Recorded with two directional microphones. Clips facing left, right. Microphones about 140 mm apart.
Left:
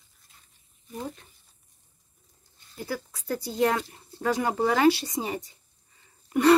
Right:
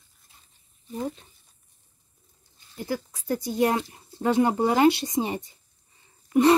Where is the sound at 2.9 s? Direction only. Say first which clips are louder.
Right 3 dB; 20° right (ahead or behind).